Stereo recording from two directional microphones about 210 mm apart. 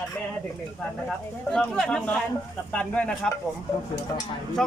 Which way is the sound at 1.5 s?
5° left (ahead or behind).